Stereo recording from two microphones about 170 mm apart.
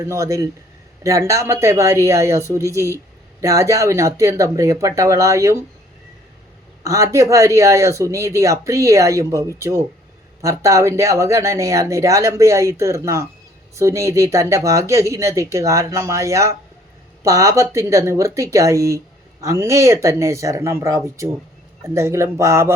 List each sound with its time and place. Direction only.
0.0 s speech: 20° right (ahead or behind)
6.8 s speech: 20° right (ahead or behind)